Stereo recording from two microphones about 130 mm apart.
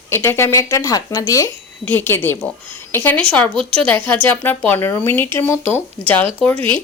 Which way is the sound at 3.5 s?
45° right (ahead or behind).